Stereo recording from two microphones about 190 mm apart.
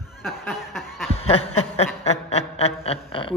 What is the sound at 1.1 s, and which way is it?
Snicker, 30° left (ahead or behind).